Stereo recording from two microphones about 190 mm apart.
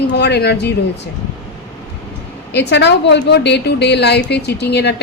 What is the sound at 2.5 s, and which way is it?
A woman's voice, 65° left (ahead or behind).